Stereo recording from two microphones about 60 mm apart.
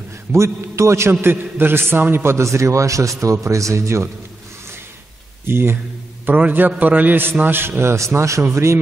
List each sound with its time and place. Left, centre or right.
0.3 s a man's voice: right
1.2 s a man's voice: right
5.5 s a man's voice: right
6.2 s a man's voice: right